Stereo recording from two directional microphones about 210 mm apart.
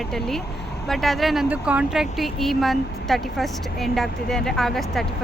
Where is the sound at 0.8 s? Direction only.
Centre (ahead or behind).